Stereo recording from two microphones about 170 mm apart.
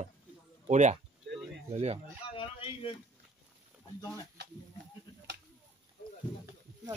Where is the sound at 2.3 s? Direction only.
30° left (ahead or behind).